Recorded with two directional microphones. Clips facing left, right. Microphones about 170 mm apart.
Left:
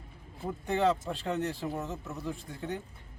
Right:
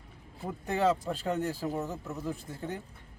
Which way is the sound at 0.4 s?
Centre (ahead or behind).